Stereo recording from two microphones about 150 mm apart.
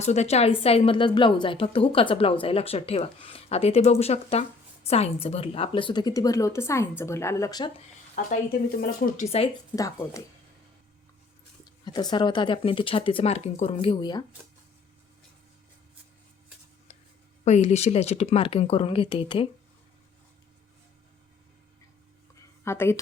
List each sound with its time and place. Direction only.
0.0 s a woman's voice: 50° left (ahead or behind); by 7.7 s 25° left (ahead or behind)
8.8 s speech: 50° left (ahead or behind)
9.7 s a woman's voice: 20° left (ahead or behind)
11.6 s a woman's voice: 25° left (ahead or behind)
16.9 s a sound: 40° left (ahead or behind)
17.4 s a woman's voice: 50° left (ahead or behind)
22.6 s speech: 15° left (ahead or behind)